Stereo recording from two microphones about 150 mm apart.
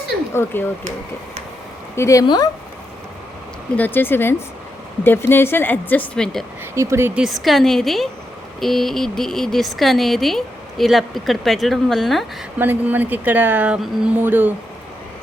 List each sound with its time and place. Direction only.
2.0 s speech: 20° left (ahead or behind)
3.8 s speech: 10° left (ahead or behind)
6.7 s speech: 20° right (ahead or behind); by 12.2 s centre (ahead or behind)
12.5 s speech: 15° right (ahead or behind)